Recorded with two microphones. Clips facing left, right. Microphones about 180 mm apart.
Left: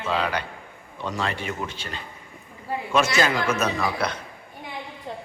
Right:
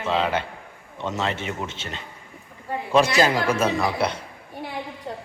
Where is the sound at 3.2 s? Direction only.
35° right (ahead or behind).